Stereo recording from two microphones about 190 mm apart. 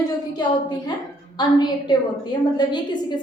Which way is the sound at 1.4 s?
20° left (ahead or behind).